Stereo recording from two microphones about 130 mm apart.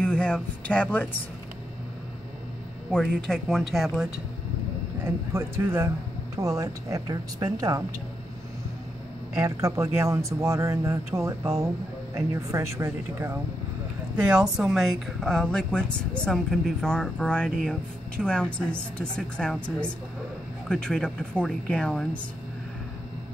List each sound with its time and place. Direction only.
0.0 s speech: 10° left (ahead or behind)
2.9 s speech: 5° left (ahead or behind)
5.0 s speech: 20° right (ahead or behind)
9.3 s speech: 25° right (ahead or behind)
14.1 s speech: 5° right (ahead or behind)